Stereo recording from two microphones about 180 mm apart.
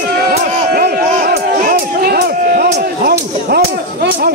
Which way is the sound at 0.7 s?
55° right (ahead or behind).